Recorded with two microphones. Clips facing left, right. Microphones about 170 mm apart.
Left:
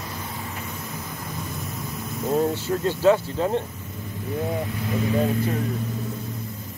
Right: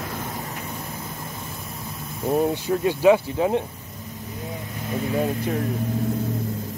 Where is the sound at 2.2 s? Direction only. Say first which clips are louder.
Right 1 dB; 15° right (ahead or behind).